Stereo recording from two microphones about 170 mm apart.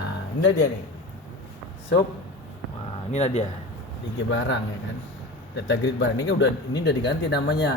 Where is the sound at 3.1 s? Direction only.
40° left (ahead or behind).